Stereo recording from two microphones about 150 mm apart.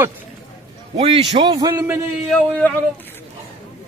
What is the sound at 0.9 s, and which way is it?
Speech, 45° right (ahead or behind).